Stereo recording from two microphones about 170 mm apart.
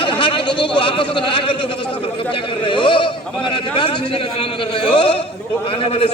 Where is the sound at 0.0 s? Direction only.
30° left (ahead or behind).